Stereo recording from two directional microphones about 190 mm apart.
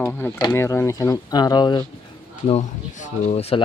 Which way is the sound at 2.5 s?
35° left (ahead or behind).